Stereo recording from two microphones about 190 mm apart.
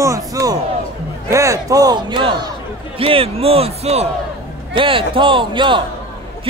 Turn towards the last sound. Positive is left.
turn(degrees=-25)  # may be behind; listen again after turning